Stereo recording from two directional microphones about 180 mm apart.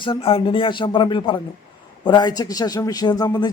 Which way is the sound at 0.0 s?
30° left (ahead or behind).